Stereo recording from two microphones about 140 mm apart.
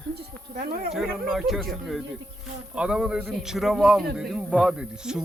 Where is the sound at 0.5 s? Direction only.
90° right.